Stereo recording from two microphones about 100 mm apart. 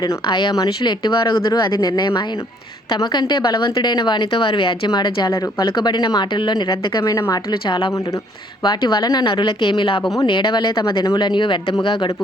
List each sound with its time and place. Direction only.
0.3 s a woman's voice: 50° left (ahead or behind)
0.5 s a woman's voice: 35° left (ahead or behind)
1.0 s a woman's voice: 50° left (ahead or behind)
4.9 s a woman's voice: 45° left (ahead or behind)
5.6 s a woman's voice: 50° left (ahead or behind)
7.0 s a woman's voice: 35° left (ahead or behind)
7.5 s speech: 55° left (ahead or behind)
8.6 s a woman's voice: 45° left (ahead or behind)
9.3 s a woman's voice: 55° left (ahead or behind)